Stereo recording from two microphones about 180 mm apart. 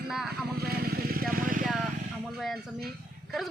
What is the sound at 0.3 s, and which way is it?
Vehicle, 60° right (ahead or behind).